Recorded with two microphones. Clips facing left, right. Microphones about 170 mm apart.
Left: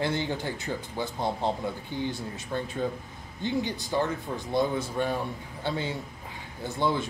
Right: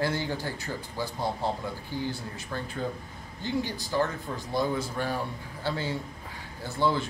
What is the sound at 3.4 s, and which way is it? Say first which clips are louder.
Speech: left 2 dB; 20° left (ahead or behind).